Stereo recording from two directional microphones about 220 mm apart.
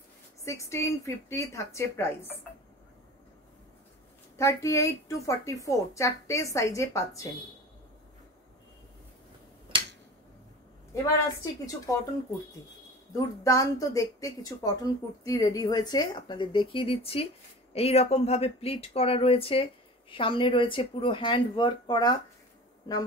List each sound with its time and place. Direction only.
0.5 s speech: 15° left (ahead or behind)
4.4 s speech: 15° left (ahead or behind)
11.6 s speech: 15° left (ahead or behind)
13.1 s a woman's voice: 15° left (ahead or behind)